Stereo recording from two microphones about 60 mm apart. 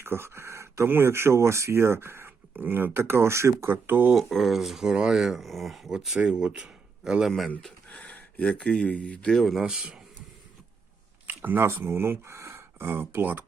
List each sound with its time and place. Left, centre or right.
0.0 s speech: right
0.9 s speech: right
3.7 s speech: right
4.2 s speech: centre
6.1 s speech: centre
7.3 s speech: centre
7.9 s speech: left
9.3 s speech: centre
9.6 s speech: centre
11.3 s speech: right